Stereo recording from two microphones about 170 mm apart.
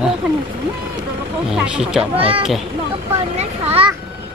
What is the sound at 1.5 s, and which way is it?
Speech, 5° right (ahead or behind).